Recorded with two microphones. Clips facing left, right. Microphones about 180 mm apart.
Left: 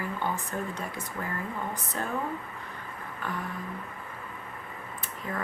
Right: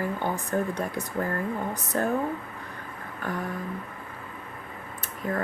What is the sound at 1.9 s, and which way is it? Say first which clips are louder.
Speech: right 9 dB; 50° right (ahead or behind).